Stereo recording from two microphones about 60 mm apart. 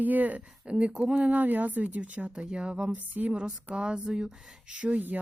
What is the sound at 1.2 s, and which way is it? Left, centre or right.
Speech, right.